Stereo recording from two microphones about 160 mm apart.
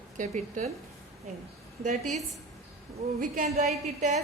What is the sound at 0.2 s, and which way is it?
Speech, 50° right (ahead or behind).